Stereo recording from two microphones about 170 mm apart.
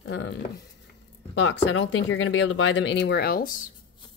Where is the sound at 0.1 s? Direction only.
90° left.